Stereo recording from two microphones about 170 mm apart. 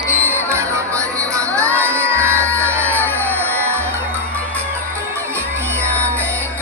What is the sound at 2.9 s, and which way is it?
Music, 10° left (ahead or behind).